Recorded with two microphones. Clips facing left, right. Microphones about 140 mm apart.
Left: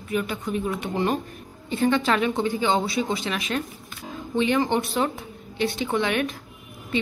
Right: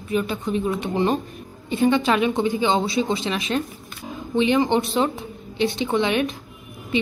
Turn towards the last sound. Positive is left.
turn(degrees=-20)  # may be behind; listen again after turning